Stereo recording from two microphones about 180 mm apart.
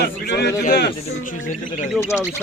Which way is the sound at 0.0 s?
70° left (ahead or behind).